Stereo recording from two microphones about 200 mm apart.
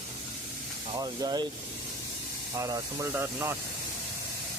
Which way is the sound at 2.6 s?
15° right (ahead or behind).